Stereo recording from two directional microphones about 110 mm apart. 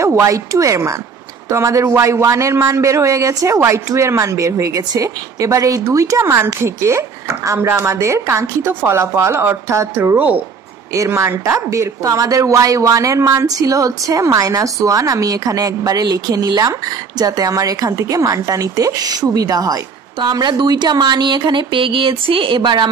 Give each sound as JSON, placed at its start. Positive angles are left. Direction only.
{"t": 0.0, "sound": "speech", "side_deg": -25}
{"t": 10.9, "sound": "a woman's voice", "side_deg": -25}